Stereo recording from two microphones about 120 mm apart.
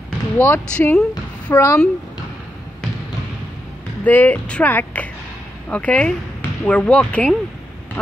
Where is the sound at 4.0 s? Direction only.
15° left (ahead or behind).